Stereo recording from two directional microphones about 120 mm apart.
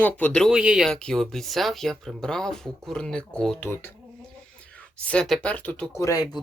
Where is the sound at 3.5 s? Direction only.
20° left (ahead or behind).